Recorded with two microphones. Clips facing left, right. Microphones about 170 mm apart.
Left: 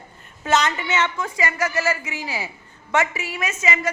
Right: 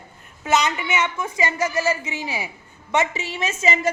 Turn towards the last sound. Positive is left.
turn(degrees=-30)  # may be behind; listen again after turning